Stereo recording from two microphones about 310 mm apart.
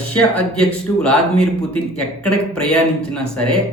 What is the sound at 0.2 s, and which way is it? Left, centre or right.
Speech, centre.